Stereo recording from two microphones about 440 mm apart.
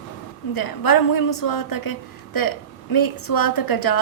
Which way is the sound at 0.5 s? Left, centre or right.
Left.